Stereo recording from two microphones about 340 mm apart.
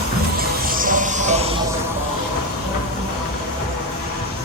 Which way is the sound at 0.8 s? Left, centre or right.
Right.